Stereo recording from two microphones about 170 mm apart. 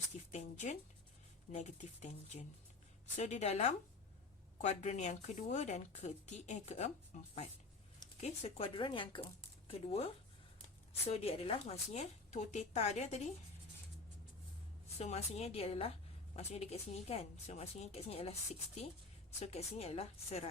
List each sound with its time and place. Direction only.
0.3 s speech: 40° left (ahead or behind)
8.2 s speech: 35° left (ahead or behind)
11.1 s speech: 35° left (ahead or behind)
14.9 s speech: 40° left (ahead or behind)